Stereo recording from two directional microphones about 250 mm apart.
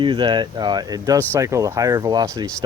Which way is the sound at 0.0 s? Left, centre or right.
Centre.